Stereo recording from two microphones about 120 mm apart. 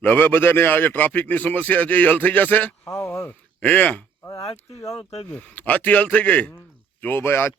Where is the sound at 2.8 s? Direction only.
25° left (ahead or behind).